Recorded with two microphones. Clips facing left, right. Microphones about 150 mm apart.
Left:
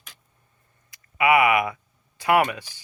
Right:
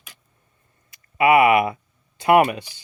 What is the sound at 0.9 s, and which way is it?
Speech, 30° right (ahead or behind).